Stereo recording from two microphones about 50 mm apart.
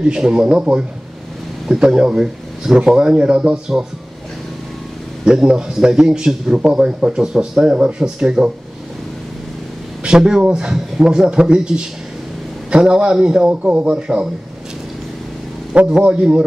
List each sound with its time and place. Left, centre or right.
0.0 s speech: centre
5.4 s speech: centre
10.0 s speech: centre
15.7 s speech: right